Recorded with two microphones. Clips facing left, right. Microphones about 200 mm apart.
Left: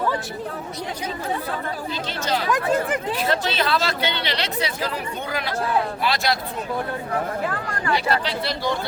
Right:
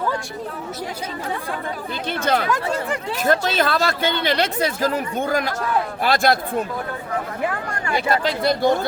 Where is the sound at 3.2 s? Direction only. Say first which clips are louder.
Right 6 dB; 45° right (ahead or behind).